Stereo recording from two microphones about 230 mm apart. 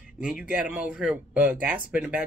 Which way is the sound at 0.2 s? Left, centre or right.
Centre.